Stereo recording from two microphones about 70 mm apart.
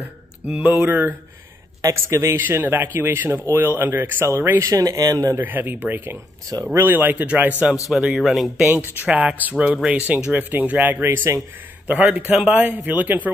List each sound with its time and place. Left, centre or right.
0.0 s speech: centre
1.8 s a man's voice: right
2.4 s speech: right
4.6 s speech: right
5.4 s speech: right
7.9 s speech: centre
8.6 s speech: right
9.0 s speech: right